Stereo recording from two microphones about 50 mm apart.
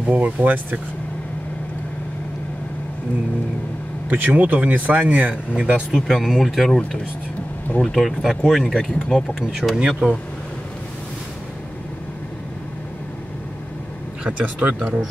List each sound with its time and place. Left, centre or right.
0.1 s speech: right
4.1 s speech: right
5.6 s speech: right
5.9 s speech: centre
7.8 s speech: centre
8.7 s speech: left
9.5 s speech: centre
14.2 s speech: right